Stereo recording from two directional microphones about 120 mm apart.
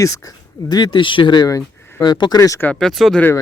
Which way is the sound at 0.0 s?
30° left (ahead or behind).